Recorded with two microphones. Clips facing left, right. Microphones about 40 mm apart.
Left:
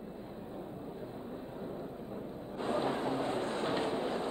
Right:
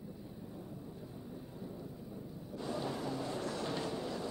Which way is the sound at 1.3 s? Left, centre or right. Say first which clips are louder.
Left 5 dB; left.